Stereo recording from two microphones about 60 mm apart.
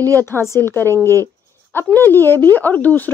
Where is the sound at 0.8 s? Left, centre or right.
Right.